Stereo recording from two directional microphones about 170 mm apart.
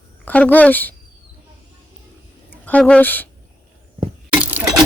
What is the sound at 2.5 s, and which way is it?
Speech, 10° left (ahead or behind).